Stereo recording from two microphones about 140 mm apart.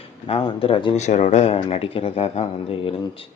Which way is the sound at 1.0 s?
55° left (ahead or behind).